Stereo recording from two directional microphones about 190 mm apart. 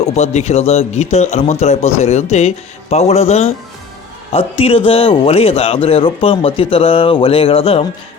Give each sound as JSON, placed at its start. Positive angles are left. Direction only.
{"t": 0.0, "sound": "a man's voice", "side_deg": 35}